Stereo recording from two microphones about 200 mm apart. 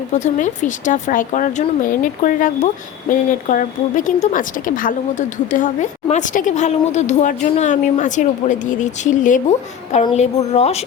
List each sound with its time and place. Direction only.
0.1 s speech: 35° left (ahead or behind)